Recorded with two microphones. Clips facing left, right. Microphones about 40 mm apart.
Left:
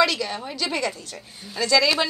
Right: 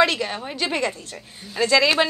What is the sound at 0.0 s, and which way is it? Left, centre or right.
A woman's voice, right.